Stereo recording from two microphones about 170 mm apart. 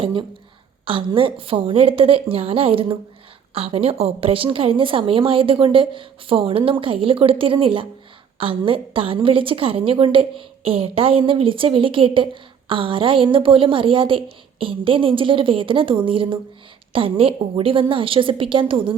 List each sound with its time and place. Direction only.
0.0 s a woman's voice: 30° right (ahead or behind)